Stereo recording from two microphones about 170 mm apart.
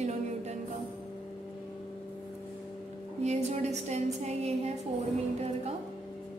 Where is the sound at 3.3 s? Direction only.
40° right (ahead or behind).